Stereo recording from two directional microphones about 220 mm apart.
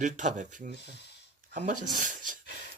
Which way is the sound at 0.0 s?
35° right (ahead or behind).